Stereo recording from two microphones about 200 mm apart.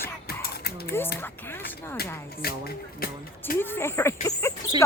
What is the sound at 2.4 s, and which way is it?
Speech, 50° left (ahead or behind).